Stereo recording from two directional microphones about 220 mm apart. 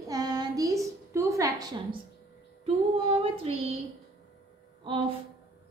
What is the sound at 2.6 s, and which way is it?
Female singing, 25° right (ahead or behind).